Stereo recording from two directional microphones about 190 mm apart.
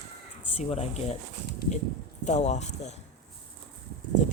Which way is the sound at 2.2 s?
40° left (ahead or behind).